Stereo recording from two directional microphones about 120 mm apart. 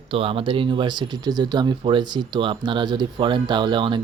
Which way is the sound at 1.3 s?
35° right (ahead or behind).